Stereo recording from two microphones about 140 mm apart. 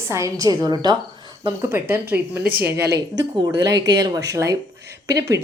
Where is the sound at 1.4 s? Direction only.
15° right (ahead or behind).